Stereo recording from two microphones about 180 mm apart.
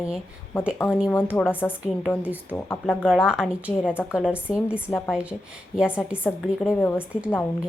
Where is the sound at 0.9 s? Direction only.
5° right (ahead or behind).